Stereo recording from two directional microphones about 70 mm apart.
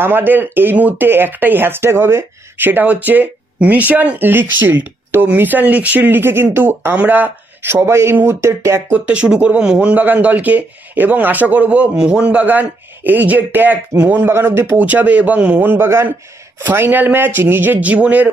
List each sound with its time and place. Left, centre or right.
0.0 s speech: right
8.9 s speech: centre; by 14.8 s right
14.8 s speech: right